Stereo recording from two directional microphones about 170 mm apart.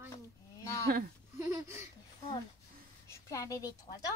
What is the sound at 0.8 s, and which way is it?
Speech, 60° right (ahead or behind).